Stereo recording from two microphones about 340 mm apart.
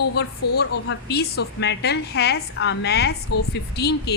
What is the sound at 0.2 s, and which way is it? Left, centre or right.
A woman's voice, left.